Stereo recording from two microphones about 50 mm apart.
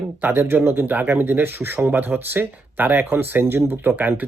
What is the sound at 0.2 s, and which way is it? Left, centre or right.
Speech, right.